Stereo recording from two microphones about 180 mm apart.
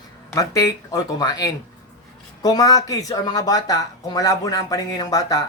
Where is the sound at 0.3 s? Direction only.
20° left (ahead or behind).